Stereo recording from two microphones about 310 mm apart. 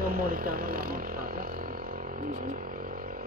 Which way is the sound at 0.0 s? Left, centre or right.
Right.